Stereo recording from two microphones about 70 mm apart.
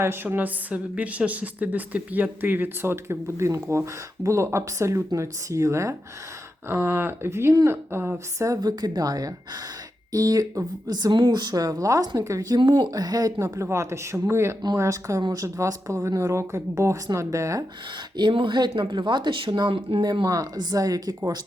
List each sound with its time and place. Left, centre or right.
0.0 s speech: right
8.6 s a woman's voice: right
10.8 s a woman's voice: right
13.4 s a woman's voice: right
15.2 s speech: right
15.4 s a woman's voice: right
18.2 s speech: right